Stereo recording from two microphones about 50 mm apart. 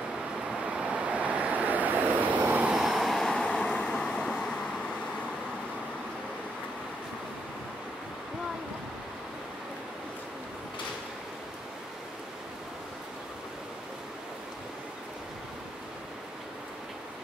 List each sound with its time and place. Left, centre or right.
0.7 s vehicle: centre
2.7 s vehicle: centre
3.3 s vehicle: centre